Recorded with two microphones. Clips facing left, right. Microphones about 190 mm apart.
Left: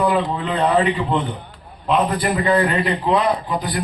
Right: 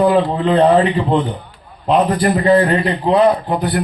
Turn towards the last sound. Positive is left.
turn(degrees=-60)  # may be behind; listen again after turning